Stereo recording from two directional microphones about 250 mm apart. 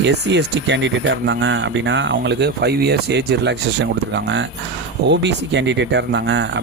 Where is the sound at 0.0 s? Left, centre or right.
Right.